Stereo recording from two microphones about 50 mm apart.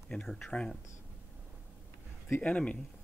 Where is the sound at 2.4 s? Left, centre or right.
Left.